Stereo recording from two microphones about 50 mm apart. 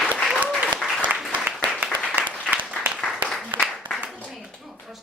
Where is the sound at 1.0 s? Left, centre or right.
Right.